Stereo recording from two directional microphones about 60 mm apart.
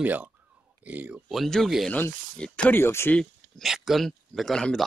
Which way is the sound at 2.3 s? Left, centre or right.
Centre.